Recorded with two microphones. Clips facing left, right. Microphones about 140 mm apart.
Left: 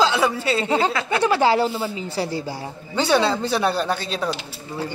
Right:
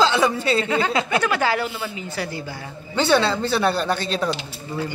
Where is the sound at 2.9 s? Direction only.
10° left (ahead or behind).